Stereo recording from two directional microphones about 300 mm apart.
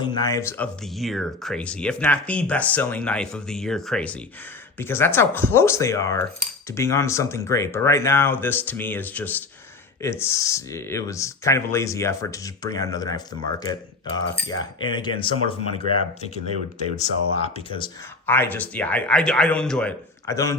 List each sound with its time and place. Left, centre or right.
0.0 s speech: centre
4.8 s cutlery: centre
14.3 s cutlery: centre
17.0 s speech: left